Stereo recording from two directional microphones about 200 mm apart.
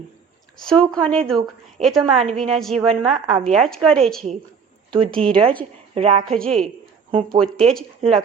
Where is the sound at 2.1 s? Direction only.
30° right (ahead or behind).